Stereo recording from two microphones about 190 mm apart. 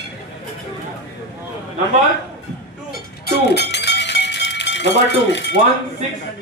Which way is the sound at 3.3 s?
60° left (ahead or behind).